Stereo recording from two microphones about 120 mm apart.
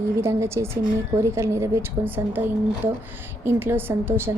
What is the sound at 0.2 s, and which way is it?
A woman's voice, 25° right (ahead or behind).